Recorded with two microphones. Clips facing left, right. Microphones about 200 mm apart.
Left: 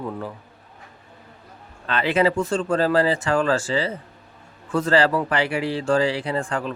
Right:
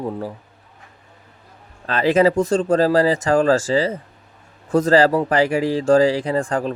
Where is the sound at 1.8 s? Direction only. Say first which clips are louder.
Right 5 dB; 40° right (ahead or behind).